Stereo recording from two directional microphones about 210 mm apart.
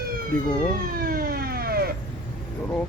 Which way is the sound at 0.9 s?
45° right (ahead or behind).